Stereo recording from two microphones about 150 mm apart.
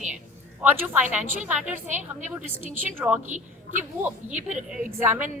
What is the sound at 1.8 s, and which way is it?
Speech, 55° right (ahead or behind).